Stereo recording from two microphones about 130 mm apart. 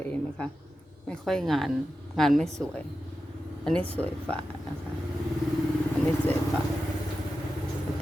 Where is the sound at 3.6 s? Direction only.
10° left (ahead or behind).